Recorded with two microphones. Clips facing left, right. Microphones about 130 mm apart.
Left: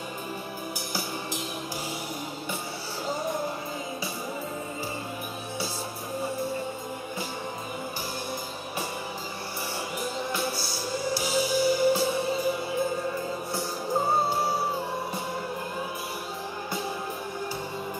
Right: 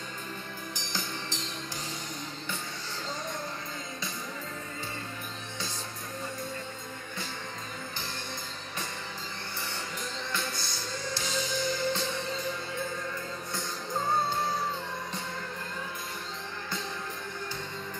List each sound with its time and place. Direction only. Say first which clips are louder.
0.7 s music: left 2 dB; 10° left (ahead or behind)
3.1 s music: left 8 dB; 10° left (ahead or behind)
6.2 s music: left 8 dB; 10° left (ahead or behind)
10.1 s music: left 5 dB; 10° left (ahead or behind)
12.8 s music: left 7 dB; 30° left (ahead or behind)
14.3 s music: left 4 dB; 10° left (ahead or behind)